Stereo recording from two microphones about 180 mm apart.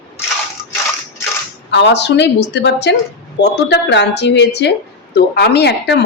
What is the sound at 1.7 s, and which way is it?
Speech, 75° left (ahead or behind).